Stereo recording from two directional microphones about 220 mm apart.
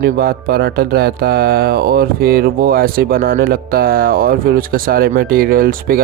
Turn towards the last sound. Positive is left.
turn(degrees=-40)  # may be behind; listen again after turning